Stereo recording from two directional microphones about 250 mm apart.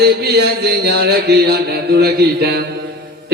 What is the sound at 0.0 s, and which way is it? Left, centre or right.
A man's voice, right.